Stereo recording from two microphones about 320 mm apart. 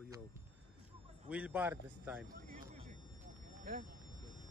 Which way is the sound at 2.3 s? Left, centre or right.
Right.